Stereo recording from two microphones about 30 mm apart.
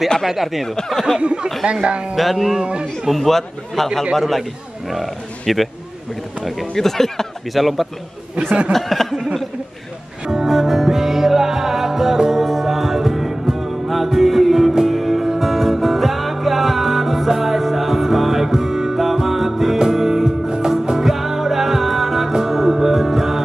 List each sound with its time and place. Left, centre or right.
0.3 s speech: centre
1.2 s speech: right
1.9 s music: right
2.3 s speech: centre
2.6 s speech: right
3.1 s a man's voice: centre
7.5 s a man's voice: centre
8.4 s speech: right
8.7 s a man's voice: centre
9.1 s a sound: centre
10.2 s music: centre
20.2 s music: right
21.0 s music: centre